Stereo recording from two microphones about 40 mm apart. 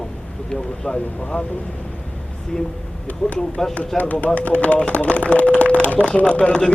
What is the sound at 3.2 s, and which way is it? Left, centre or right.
Speech, left.